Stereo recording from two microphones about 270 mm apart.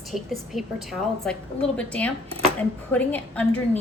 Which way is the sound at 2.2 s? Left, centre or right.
Right.